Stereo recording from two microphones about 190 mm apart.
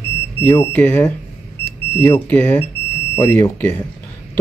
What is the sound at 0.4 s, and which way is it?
Speech, 10° left (ahead or behind).